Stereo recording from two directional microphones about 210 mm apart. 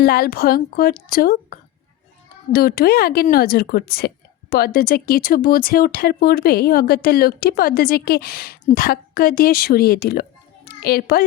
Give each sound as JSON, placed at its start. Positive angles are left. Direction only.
{"t": 0.0, "sound": "speech", "side_deg": 45}